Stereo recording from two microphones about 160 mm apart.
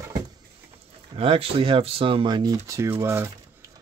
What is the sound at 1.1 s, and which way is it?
Speech, 35° right (ahead or behind).